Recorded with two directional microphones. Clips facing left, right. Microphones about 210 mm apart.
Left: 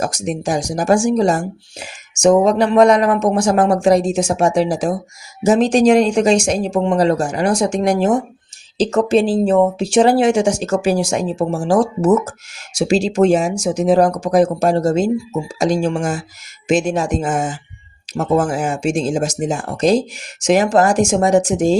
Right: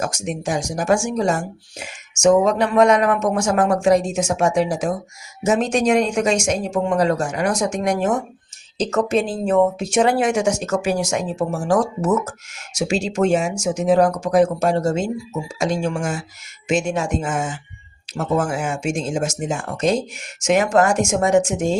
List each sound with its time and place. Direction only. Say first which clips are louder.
0.0 s speech: left 4 dB; 35° left (ahead or behind)